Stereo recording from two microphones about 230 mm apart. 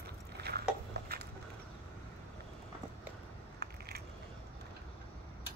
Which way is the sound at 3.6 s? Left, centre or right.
Right.